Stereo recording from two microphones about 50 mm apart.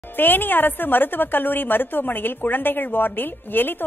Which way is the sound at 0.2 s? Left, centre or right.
Left.